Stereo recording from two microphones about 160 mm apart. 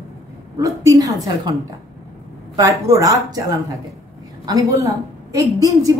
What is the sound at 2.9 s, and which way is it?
A woman's voice, 20° right (ahead or behind).